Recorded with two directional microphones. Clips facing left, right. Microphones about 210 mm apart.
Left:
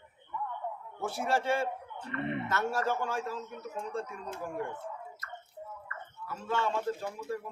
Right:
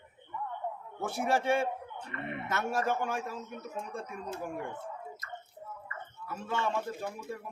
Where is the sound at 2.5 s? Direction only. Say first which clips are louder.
Right 3 dB; 15° right (ahead or behind).